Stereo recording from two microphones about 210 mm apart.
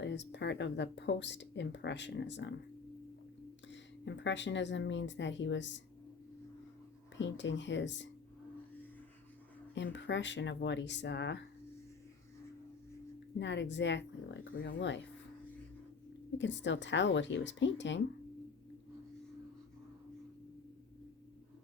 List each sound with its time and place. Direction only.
0.0 s speech: 55° left (ahead or behind)
4.0 s speech: 60° left (ahead or behind)
7.2 s speech: 60° left (ahead or behind)
9.7 s speech: 60° left (ahead or behind)
13.4 s speech: 60° left (ahead or behind)
16.4 s speech: 60° left (ahead or behind)